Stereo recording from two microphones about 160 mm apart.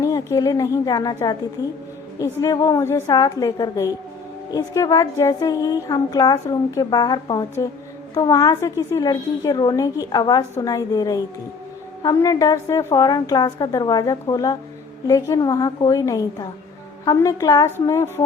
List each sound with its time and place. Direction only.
0.0 s a woman's voice: 20° left (ahead or behind)